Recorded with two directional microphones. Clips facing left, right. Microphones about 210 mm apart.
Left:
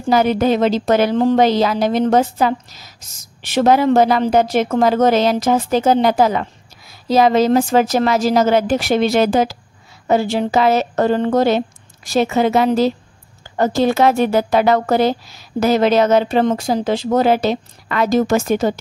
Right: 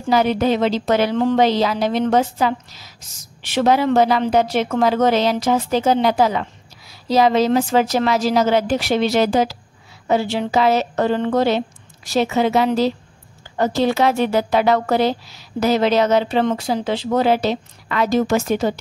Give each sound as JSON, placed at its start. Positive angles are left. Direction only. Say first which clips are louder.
{"t": 0.1, "sound": "a woman's voice", "louder": "left 2 dB", "side_deg": 45}